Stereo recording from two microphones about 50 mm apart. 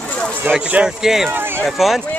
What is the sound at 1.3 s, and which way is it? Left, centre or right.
Speech, right.